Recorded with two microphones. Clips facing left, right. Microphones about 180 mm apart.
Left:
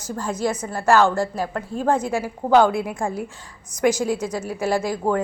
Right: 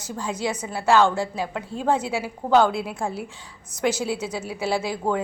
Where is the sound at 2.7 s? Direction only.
50° left (ahead or behind).